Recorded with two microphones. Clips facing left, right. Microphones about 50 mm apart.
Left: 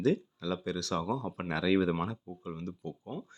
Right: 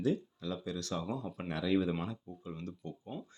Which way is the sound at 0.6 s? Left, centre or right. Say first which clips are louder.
Left 4 dB; left.